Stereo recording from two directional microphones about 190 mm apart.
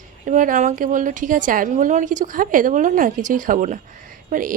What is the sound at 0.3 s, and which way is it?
A woman's voice, 45° right (ahead or behind).